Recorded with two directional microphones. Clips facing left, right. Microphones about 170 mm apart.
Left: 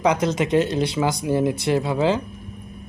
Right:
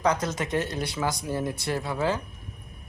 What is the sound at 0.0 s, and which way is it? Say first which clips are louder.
A man's voice: left 6 dB; 20° left (ahead or behind).